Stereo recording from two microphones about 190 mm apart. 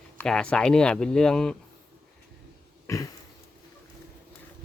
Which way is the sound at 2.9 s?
15° left (ahead or behind).